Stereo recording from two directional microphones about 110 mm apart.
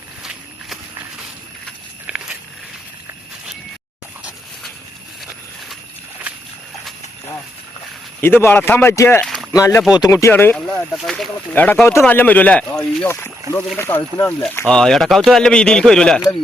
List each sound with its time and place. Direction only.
2.0 s walk: 5° right (ahead or behind)
8.2 s speech: 20° left (ahead or behind)
9.2 s a sound: 5° left (ahead or behind)
9.5 s speech: 30° left (ahead or behind)
10.3 s speech: 15° left (ahead or behind)
10.9 s speech: centre (ahead or behind)
11.5 s speech: 15° left (ahead or behind)
13.1 s speech: 20° left (ahead or behind)
14.7 s speech: 5° left (ahead or behind)